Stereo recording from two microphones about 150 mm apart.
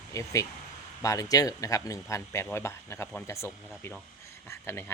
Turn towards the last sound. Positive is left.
turn(degrees=15)  # may be behind; listen again after turning